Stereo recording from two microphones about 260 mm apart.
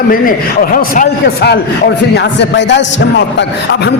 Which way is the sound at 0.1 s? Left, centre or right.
Left.